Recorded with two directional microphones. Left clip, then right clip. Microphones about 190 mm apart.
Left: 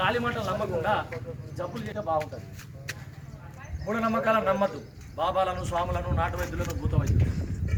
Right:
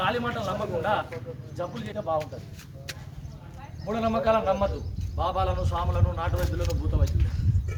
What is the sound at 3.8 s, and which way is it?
Speech, 15° left (ahead or behind).